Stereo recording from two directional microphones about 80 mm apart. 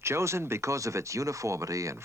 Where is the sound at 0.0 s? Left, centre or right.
Right.